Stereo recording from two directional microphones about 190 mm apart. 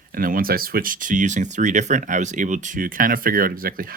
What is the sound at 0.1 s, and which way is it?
Speech, 50° right (ahead or behind).